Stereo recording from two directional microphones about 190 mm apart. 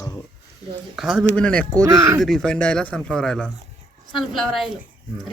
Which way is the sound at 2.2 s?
Centre (ahead or behind).